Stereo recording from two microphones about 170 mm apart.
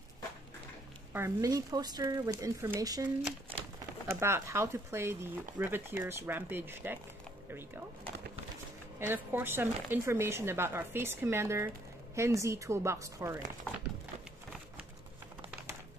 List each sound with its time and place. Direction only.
1.1 s speech: 20° right (ahead or behind)
4.1 s speech: 15° right (ahead or behind)
9.0 s speech: 15° right (ahead or behind)